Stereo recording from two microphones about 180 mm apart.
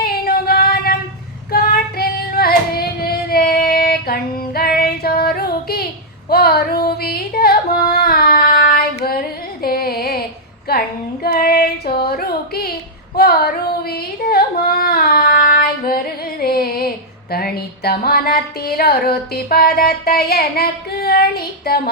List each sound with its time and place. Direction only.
0.0 s a sound: 60° left (ahead or behind)
1.5 s child singing: 60° left (ahead or behind)
6.3 s singing: 60° left (ahead or behind)
9.6 s music: 55° left (ahead or behind)
10.7 s female singing: 60° left (ahead or behind)
16.4 s music: 55° left (ahead or behind)
17.3 s a sound: 60° left (ahead or behind)